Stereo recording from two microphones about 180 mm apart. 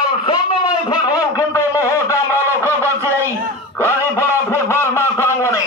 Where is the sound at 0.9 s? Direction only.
20° left (ahead or behind).